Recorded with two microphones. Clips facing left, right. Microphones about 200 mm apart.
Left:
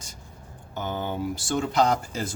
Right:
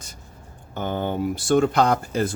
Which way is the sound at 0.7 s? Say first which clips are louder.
Right 4 dB; 55° right (ahead or behind).